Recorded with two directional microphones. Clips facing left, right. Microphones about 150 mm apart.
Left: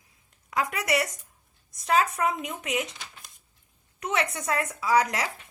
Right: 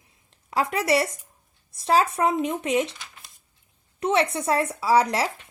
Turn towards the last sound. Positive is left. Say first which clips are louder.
# right 4 dB
turn(degrees=-30)  # may be behind; listen again after turning